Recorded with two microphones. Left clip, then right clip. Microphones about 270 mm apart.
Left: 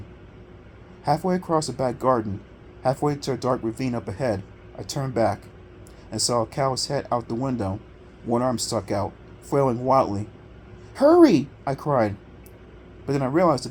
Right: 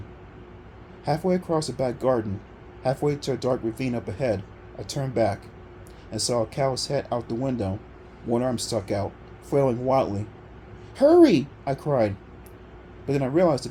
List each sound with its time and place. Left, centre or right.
1.0 s speech: left